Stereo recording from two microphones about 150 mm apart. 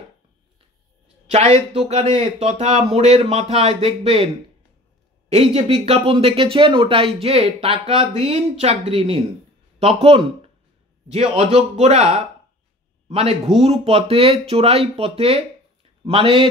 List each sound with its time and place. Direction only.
1.2 s speech: 45° right (ahead or behind)
5.3 s speech: 45° right (ahead or behind)